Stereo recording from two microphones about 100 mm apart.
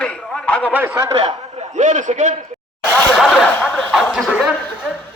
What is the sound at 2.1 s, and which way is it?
Speech, 90° right.